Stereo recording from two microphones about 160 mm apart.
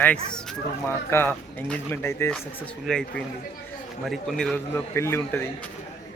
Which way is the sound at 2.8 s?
5° left (ahead or behind).